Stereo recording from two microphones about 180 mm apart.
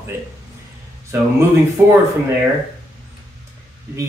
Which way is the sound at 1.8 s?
15° right (ahead or behind).